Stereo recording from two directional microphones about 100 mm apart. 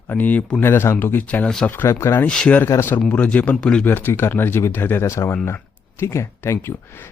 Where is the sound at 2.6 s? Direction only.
25° left (ahead or behind).